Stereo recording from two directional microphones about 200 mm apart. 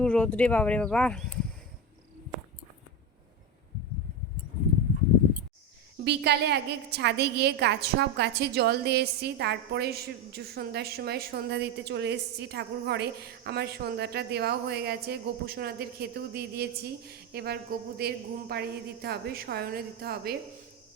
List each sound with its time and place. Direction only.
0.0 s speech: 5° left (ahead or behind)
6.1 s a woman's voice: 55° right (ahead or behind)